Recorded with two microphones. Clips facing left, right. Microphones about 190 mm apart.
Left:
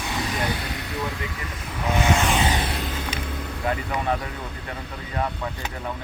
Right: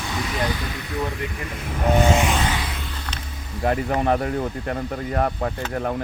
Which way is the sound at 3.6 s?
45° right (ahead or behind).